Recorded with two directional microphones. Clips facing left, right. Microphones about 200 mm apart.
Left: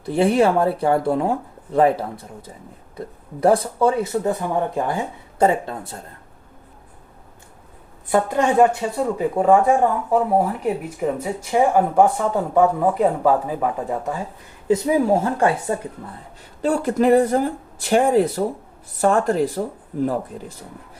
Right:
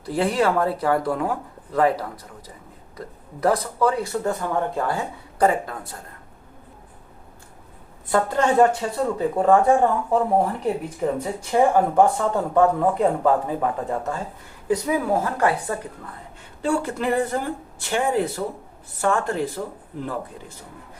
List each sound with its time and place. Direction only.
0.0 s speech: 25° left (ahead or behind)
3.4 s speech: 30° left (ahead or behind)
8.1 s speech: 15° left (ahead or behind)
14.7 s speech: 25° left (ahead or behind)
16.6 s speech: 40° left (ahead or behind)